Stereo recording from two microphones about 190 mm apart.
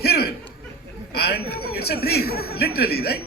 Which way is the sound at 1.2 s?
55° left (ahead or behind).